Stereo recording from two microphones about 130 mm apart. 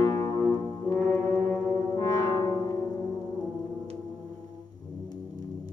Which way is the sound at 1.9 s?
30° left (ahead or behind).